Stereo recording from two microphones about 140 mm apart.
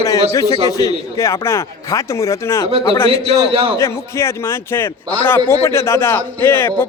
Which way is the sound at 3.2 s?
40° right (ahead or behind).